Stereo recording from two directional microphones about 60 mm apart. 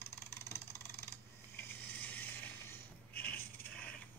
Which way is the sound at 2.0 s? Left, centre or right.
Left.